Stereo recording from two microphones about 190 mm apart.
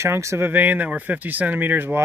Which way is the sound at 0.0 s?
15° right (ahead or behind).